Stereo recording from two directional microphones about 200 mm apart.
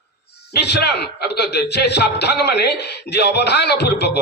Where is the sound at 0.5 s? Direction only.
55° left (ahead or behind).